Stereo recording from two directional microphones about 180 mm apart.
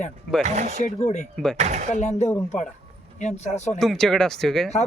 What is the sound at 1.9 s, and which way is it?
Speech, 40° left (ahead or behind).